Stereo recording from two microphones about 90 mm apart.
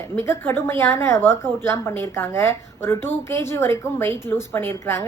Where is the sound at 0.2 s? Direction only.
30° left (ahead or behind).